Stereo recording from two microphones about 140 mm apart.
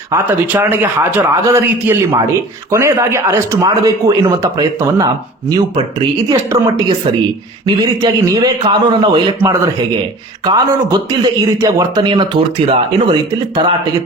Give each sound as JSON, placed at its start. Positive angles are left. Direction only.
{"t": 0.1, "sound": "a man's voice", "side_deg": -15}
{"t": 8.0, "sound": "a man's voice", "side_deg": -25}
{"t": 10.4, "sound": "a man's voice", "side_deg": -30}